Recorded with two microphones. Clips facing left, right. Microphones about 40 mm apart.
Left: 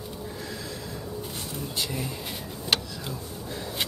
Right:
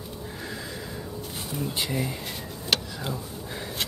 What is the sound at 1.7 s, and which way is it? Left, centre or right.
Speech, right.